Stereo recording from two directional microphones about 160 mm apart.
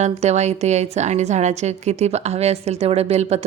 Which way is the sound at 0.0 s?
45° right (ahead or behind).